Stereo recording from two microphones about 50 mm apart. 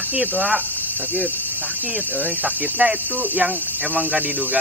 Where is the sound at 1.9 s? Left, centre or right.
Right.